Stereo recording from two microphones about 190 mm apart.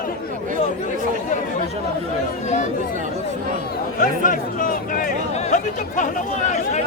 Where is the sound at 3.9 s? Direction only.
45° left (ahead or behind).